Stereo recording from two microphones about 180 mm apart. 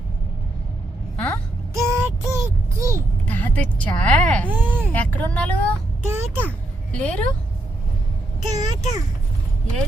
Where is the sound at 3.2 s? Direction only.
10° left (ahead or behind).